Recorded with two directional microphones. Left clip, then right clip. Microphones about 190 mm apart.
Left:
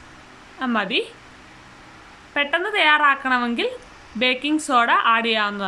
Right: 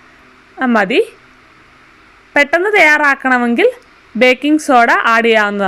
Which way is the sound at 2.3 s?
30° right (ahead or behind).